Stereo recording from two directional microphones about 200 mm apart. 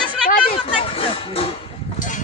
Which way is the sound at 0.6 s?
25° left (ahead or behind).